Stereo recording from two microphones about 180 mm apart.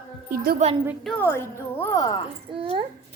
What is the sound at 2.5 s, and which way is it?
Speech, 30° right (ahead or behind).